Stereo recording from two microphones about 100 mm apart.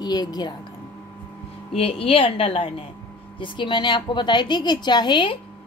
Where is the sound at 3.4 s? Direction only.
50° left (ahead or behind).